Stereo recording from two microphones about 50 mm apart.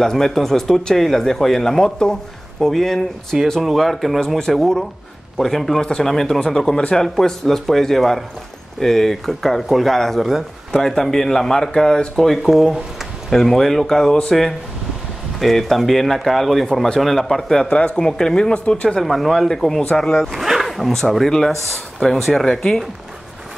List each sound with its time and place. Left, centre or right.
0.0 s speech: centre
6.8 s speech: centre
7.2 s speech: centre
12.2 s speech: centre
13.3 s speech: centre
15.3 s speech: centre
17.6 s speech: left
18.9 s speech: centre
20.2 s zipper: centre
21.3 s speech: centre